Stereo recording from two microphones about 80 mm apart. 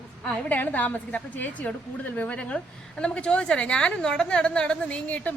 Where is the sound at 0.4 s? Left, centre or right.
Left.